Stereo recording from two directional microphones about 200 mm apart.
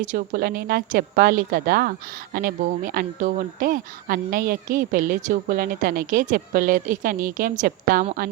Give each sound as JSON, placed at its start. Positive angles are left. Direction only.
{"t": 0.0, "sound": "a woman's voice", "side_deg": -40}